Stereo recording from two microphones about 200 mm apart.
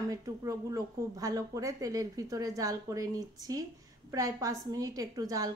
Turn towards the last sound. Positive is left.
turn(degrees=-15)  # may be behind; listen again after turning